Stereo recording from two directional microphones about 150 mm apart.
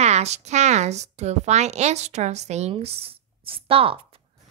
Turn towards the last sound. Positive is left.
turn(degrees=-40)  # may be behind; listen again after turning